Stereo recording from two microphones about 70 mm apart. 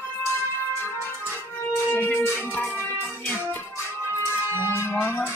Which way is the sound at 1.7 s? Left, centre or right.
Left.